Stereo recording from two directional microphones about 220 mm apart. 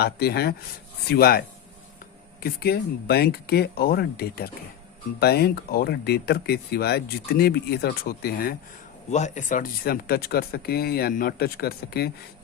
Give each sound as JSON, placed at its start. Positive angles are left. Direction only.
{"t": 0.0, "sound": "speech", "side_deg": 45}
{"t": 9.0, "sound": "speech", "side_deg": 30}